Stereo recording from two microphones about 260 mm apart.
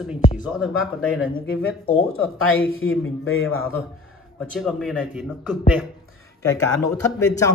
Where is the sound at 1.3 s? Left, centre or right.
Left.